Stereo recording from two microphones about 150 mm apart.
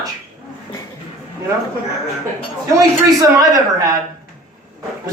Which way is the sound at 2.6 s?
20° right (ahead or behind).